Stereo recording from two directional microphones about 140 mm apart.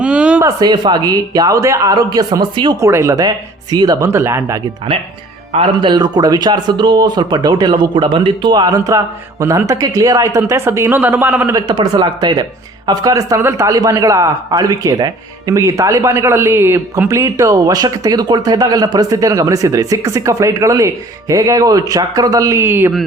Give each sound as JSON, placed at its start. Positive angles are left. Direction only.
{"t": 0.0, "sound": "a sound", "side_deg": -10}
{"t": 0.4, "sound": "speech", "side_deg": -30}
{"t": 2.8, "sound": "speech", "side_deg": -20}
{"t": 5.5, "sound": "speech", "side_deg": -35}
{"t": 11.5, "sound": "speech", "side_deg": -30}